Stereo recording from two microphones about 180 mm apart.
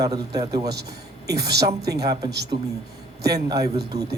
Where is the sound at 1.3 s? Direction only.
65° right (ahead or behind).